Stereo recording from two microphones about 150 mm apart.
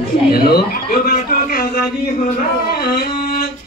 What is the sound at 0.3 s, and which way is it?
Speech, 90° left.